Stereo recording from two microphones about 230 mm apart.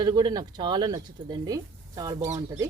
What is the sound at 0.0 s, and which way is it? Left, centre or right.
Speech, centre.